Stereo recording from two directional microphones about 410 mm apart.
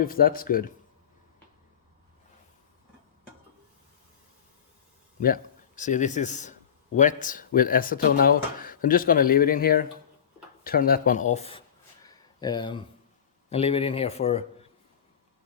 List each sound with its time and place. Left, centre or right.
0.0 s speech: left
5.2 s speech: centre
12.0 s a sound: centre
13.5 s speech: centre